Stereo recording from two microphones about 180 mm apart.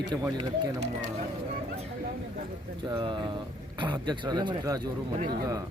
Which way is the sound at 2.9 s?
25° right (ahead or behind).